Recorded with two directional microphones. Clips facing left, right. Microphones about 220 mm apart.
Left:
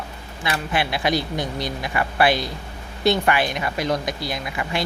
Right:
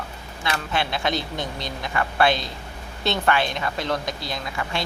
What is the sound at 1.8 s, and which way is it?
Speech, 15° left (ahead or behind).